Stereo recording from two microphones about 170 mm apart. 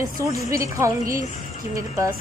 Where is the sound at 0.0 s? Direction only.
20° right (ahead or behind).